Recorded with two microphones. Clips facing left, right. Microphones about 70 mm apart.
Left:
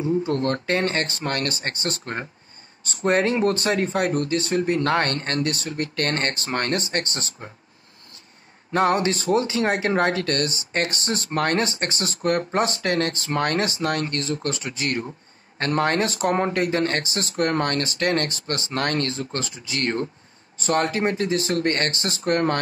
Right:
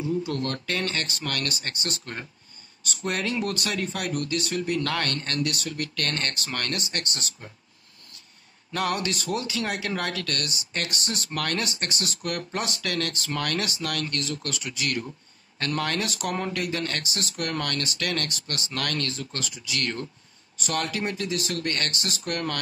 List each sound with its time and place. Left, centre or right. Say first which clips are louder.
0.0 s speech: left 5 dB; left
8.7 s speech: left 7 dB; left